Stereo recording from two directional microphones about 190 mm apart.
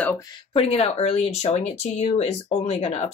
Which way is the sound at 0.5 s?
30° left (ahead or behind).